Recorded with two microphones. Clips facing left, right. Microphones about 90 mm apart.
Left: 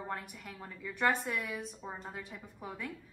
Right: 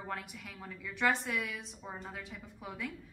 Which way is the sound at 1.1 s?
Centre (ahead or behind).